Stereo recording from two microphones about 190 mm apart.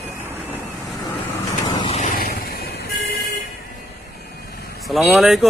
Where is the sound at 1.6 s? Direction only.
20° left (ahead or behind).